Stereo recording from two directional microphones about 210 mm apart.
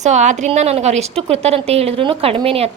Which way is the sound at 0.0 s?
35° right (ahead or behind).